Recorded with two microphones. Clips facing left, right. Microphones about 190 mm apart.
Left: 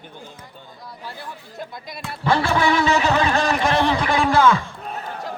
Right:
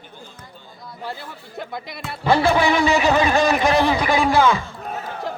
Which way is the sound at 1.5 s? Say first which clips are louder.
Right 5 dB; 60° right (ahead or behind).